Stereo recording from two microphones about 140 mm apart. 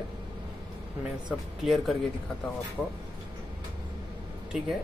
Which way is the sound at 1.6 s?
Centre (ahead or behind).